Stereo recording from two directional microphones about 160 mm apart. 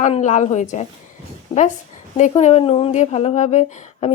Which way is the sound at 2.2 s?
50° left (ahead or behind).